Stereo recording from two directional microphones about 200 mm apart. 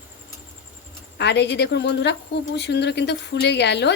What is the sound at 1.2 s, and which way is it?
Speech, 60° left (ahead or behind).